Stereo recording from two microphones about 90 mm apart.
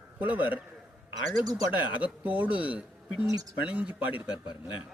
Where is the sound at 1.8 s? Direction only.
15° right (ahead or behind).